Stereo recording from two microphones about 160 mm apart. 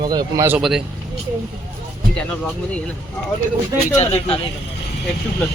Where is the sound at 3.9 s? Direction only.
40° left (ahead or behind).